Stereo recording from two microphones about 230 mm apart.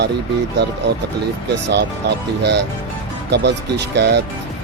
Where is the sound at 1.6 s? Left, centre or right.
Right.